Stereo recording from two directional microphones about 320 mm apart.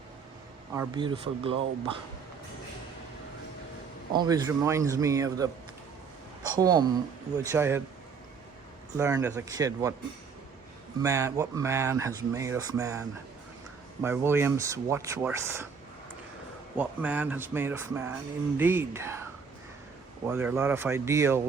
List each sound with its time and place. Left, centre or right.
0.8 s speech: centre
4.1 s speech: centre
6.6 s speech: centre
9.0 s speech: centre
11.0 s speech: centre
16.7 s speech: centre
20.2 s speech: centre